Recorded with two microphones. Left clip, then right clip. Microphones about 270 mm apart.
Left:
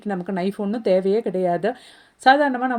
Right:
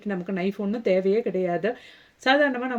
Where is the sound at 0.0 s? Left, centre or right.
Left.